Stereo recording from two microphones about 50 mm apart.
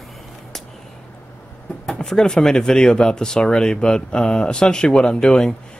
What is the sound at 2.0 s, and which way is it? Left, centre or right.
Speech, centre.